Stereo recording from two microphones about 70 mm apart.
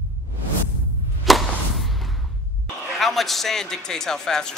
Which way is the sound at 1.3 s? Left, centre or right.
Centre.